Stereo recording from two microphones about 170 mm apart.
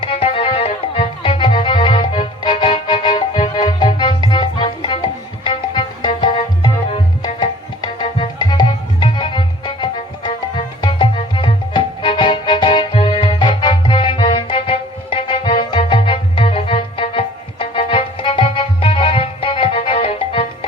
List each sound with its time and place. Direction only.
0.0 s music: 35° left (ahead or behind)